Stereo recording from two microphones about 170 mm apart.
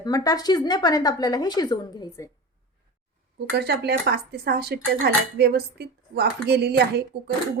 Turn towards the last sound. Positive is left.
turn(degrees=-75)  # may be behind; listen again after turning